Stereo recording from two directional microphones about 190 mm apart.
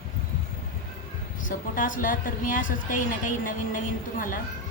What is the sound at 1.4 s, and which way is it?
A woman's voice, 45° left (ahead or behind).